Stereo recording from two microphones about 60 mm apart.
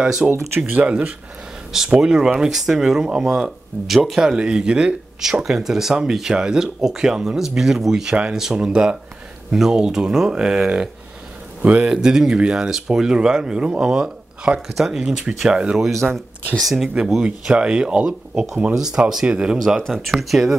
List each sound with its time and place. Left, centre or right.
0.0 s speech: centre
0.7 s speech: right
1.9 s speech: centre
17.2 s speech: centre
19.8 s speech: centre